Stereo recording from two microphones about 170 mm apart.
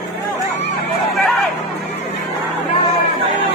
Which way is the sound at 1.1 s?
Centre (ahead or behind).